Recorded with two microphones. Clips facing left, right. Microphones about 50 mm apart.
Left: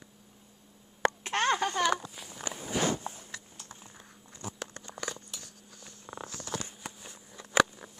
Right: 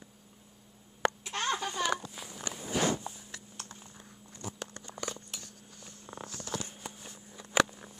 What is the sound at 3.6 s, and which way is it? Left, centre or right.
Typing, right.